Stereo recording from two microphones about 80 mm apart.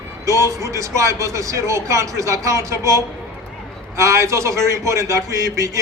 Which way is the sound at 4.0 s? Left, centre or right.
Right.